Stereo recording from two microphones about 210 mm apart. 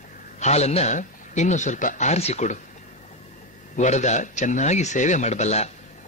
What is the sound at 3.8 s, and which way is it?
Speech, 35° left (ahead or behind).